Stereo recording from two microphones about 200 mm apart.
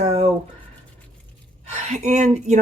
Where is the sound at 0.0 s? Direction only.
30° right (ahead or behind).